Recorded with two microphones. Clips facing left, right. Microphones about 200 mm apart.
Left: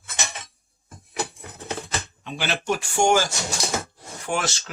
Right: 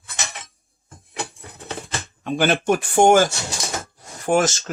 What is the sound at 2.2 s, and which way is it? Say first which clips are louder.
Speech: right 9 dB; 50° right (ahead or behind).